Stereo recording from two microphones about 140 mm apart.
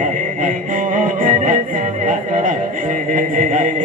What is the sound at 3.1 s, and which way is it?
Mantra, 70° right (ahead or behind).